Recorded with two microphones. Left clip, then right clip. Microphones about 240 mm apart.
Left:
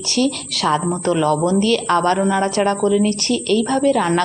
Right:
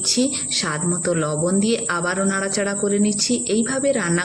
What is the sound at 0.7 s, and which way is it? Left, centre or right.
A woman's voice, centre.